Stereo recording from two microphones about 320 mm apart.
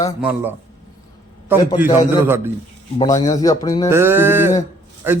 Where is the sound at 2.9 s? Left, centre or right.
Centre.